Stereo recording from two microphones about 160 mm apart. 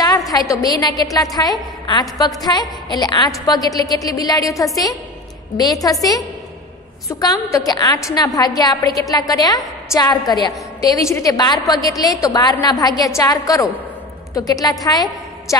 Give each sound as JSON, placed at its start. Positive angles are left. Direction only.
{"t": 0.3, "sound": "a woman's voice", "side_deg": 20}
{"t": 7.1, "sound": "a woman's voice", "side_deg": 20}